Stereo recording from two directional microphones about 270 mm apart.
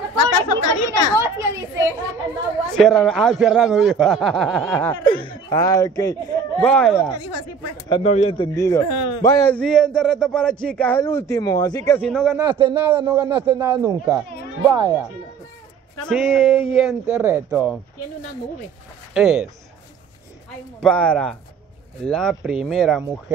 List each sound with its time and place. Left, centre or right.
0.2 s speech: left
1.1 s a man's voice: centre
2.7 s a man's voice: centre
5.0 s a man's voice: centre
7.2 s speech: left
7.9 s speech: left
8.8 s speech: left
9.2 s a man's voice: centre
12.4 s a man's voice: centre
16.1 s a man's voice: centre
16.5 s a man's voice: centre
19.1 s speech: centre
20.8 s a man's voice: centre